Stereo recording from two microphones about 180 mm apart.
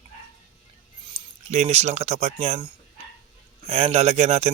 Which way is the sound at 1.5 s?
35° right (ahead or behind).